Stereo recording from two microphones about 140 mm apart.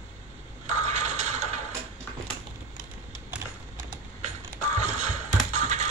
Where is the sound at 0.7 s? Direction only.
55° right (ahead or behind).